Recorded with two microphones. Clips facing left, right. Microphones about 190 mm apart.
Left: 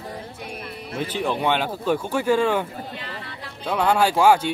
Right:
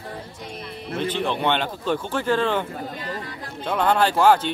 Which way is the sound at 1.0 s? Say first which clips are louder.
Even; 10° left (ahead or behind).